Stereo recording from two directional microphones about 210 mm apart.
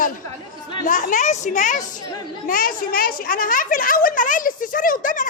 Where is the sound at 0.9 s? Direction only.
40° left (ahead or behind).